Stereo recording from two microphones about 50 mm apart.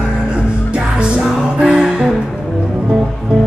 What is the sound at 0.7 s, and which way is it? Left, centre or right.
Music, centre.